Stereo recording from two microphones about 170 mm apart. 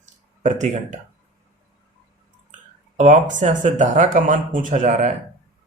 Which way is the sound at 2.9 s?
45° right (ahead or behind).